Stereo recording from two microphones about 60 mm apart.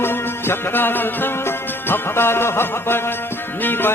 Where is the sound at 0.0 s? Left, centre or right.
Left.